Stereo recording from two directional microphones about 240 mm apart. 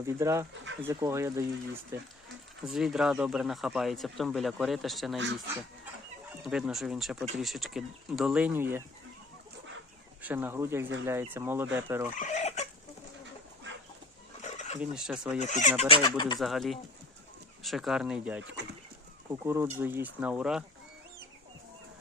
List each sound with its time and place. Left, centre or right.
0.0 s speech: centre
2.6 s speech: centre
5.1 s speech: right
6.4 s speech: centre
10.2 s speech: centre
12.1 s chicken: left
14.4 s a sound: left
14.8 s speech: centre
15.4 s speech: left
15.9 s speech: centre
16.4 s speech: centre